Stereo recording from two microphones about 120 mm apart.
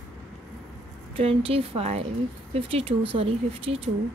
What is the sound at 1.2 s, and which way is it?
Speech, 50° right (ahead or behind).